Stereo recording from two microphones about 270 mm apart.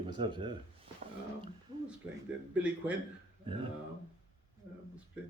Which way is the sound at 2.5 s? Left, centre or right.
Centre.